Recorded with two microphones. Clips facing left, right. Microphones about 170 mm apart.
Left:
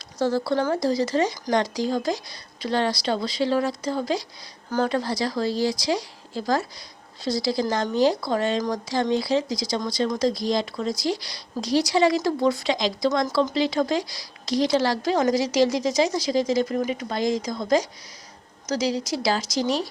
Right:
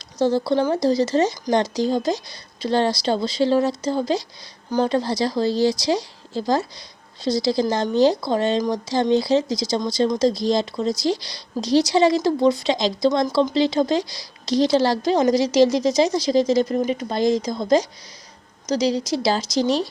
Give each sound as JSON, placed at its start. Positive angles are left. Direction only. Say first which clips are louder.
{"t": 0.2, "sound": "speech", "louder": "right 4 dB", "side_deg": -20}